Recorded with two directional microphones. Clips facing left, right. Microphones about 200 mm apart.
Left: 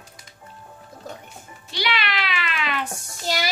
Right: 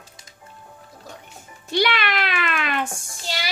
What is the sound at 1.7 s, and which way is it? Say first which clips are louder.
Meow: right 5 dB; 50° right (ahead or behind).